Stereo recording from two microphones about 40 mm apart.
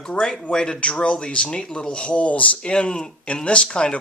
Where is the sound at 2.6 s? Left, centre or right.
Left.